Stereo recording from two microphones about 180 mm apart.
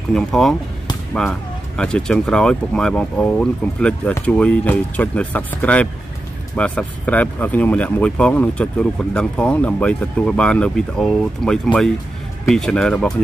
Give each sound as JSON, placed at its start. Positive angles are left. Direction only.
{"t": 0.1, "sound": "speech", "side_deg": 0}